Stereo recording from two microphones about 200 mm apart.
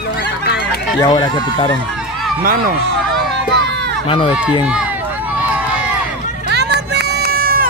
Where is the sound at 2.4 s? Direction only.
45° right (ahead or behind).